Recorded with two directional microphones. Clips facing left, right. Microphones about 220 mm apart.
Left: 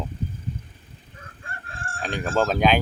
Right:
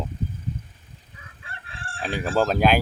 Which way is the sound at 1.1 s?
45° left (ahead or behind).